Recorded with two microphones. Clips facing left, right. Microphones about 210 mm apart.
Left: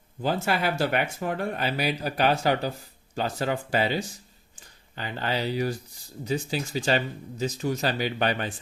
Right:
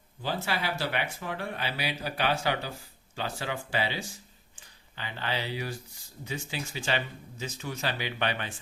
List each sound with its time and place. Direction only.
0.2 s speech: 50° left (ahead or behind)